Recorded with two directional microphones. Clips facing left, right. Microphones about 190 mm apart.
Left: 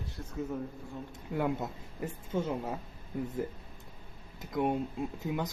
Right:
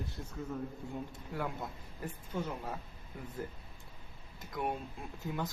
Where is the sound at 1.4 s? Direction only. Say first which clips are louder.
Left 7 dB; 25° left (ahead or behind).